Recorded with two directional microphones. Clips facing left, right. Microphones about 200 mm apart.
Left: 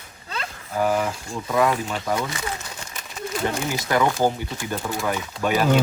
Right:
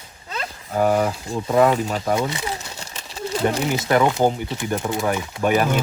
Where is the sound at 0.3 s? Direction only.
35° right (ahead or behind); by 5.5 s 20° right (ahead or behind).